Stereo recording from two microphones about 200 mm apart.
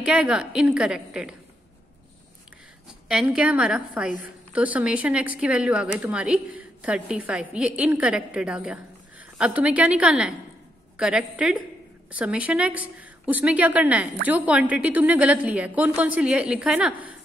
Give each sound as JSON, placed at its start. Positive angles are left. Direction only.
{"t": 0.0, "sound": "a woman's voice", "side_deg": -5}
{"t": 3.1, "sound": "a woman's voice", "side_deg": -5}